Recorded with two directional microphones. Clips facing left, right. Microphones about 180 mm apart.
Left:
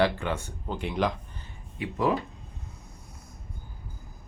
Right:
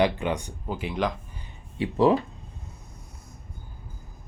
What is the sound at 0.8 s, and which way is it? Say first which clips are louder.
Speech: even; centre (ahead or behind).